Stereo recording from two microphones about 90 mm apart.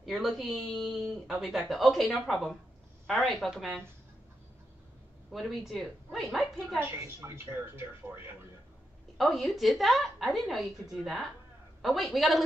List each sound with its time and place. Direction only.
0.0 s speech: centre (ahead or behind)
5.3 s speech: centre (ahead or behind)
6.8 s a woman's voice: 30° right (ahead or behind)
9.2 s speech: centre (ahead or behind)